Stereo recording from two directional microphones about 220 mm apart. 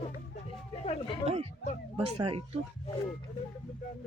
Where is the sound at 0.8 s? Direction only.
30° left (ahead or behind).